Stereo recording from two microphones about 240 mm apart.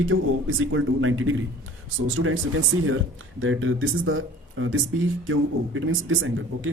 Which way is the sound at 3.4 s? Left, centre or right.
Right.